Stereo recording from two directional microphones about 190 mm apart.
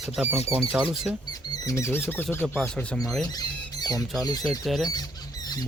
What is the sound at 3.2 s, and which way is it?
Squawk, 20° left (ahead or behind).